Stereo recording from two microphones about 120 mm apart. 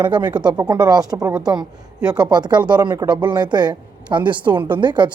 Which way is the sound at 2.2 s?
35° right (ahead or behind).